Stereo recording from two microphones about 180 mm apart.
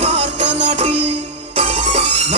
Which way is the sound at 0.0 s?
40° right (ahead or behind).